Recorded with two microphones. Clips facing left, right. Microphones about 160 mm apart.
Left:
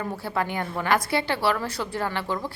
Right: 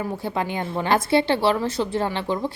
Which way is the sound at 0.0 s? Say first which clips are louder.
Right 2 dB; 20° right (ahead or behind).